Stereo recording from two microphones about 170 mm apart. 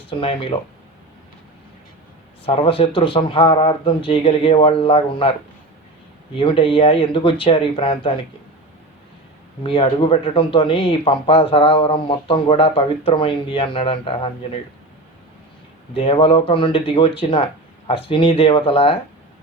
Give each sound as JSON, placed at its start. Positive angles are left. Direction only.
{"t": 0.1, "sound": "speech", "side_deg": 35}
{"t": 2.4, "sound": "speech", "side_deg": 35}
{"t": 6.3, "sound": "speech", "side_deg": 30}
{"t": 9.6, "sound": "speech", "side_deg": 30}
{"t": 16.0, "sound": "speech", "side_deg": 35}